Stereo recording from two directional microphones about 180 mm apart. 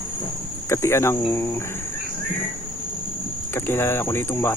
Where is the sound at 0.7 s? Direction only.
15° left (ahead or behind).